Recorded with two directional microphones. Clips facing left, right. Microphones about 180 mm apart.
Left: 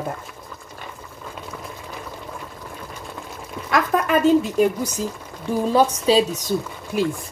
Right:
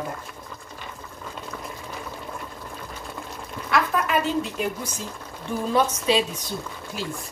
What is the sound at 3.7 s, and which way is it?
A woman's voice, 45° left (ahead or behind).